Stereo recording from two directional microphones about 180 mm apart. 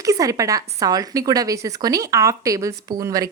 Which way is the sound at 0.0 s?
20° right (ahead or behind).